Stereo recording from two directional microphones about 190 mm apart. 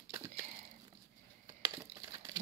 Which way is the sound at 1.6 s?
20° right (ahead or behind).